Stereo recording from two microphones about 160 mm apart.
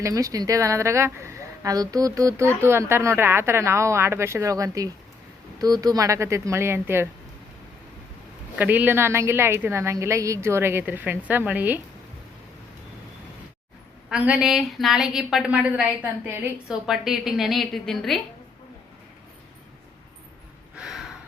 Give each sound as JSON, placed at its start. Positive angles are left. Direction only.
{"t": 0.0, "sound": "a woman's voice", "side_deg": -20}
{"t": 8.5, "sound": "a woman's voice", "side_deg": -10}
{"t": 14.1, "sound": "a woman's voice", "side_deg": -5}
{"t": 20.7, "sound": "gasp", "side_deg": -5}